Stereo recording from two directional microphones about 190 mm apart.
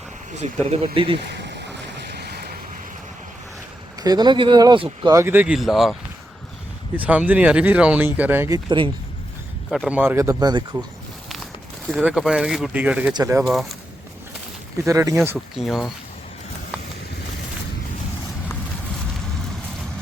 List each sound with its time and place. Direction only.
0.4 s speech: 35° right (ahead or behind)
1.4 s waves: 65° right (ahead or behind)
4.0 s speech: 20° right (ahead or behind)
9.6 s speech: centre (ahead or behind); by 10.8 s 20° right (ahead or behind)
11.9 s speech: centre (ahead or behind); by 13.4 s 15° right (ahead or behind)
13.4 s speech: centre (ahead or behind)
14.8 s speech: 15° right (ahead or behind)
15.5 s speech: centre (ahead or behind)